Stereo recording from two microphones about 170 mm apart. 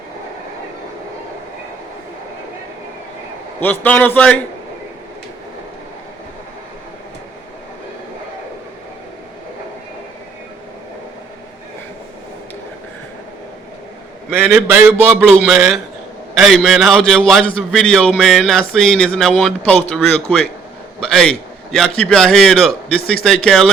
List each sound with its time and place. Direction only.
3.6 s a man's voice: 10° left (ahead or behind)
14.3 s a man's voice: 5° right (ahead or behind)
15.2 s a man's voice: 5° left (ahead or behind)